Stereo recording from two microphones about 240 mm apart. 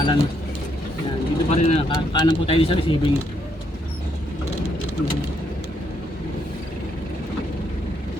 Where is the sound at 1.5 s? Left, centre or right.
Left.